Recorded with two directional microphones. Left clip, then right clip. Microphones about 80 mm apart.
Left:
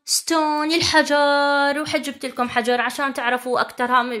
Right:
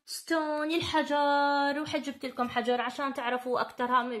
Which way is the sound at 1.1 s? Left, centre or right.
Centre.